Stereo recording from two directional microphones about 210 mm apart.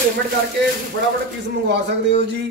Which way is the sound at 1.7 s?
55° right (ahead or behind).